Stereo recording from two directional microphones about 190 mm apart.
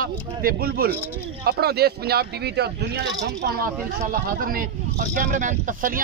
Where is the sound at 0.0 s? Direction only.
50° right (ahead or behind).